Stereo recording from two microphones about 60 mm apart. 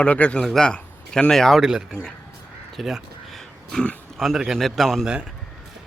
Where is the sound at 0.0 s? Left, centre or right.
Left.